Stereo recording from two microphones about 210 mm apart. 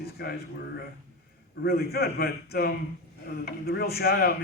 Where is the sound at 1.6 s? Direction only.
45° left (ahead or behind).